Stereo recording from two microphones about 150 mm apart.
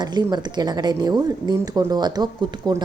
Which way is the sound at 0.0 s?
30° right (ahead or behind).